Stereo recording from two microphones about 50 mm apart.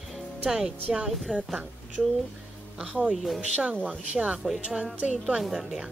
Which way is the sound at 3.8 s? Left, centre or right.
Right.